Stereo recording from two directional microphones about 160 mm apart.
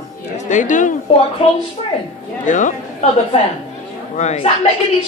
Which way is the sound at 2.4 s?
50° left (ahead or behind).